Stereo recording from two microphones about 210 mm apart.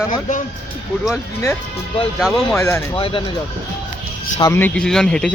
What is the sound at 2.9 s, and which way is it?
Speech, 25° left (ahead or behind).